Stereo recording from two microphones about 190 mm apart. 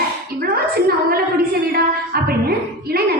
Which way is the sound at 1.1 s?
55° right (ahead or behind).